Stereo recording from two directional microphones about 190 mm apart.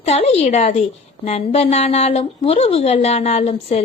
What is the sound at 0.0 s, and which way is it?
A woman's voice, 35° left (ahead or behind).